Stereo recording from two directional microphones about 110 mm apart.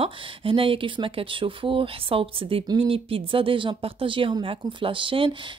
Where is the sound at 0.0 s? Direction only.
55° right (ahead or behind).